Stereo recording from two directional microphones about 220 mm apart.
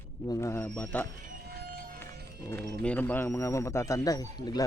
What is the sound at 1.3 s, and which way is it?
Music, 45° right (ahead or behind).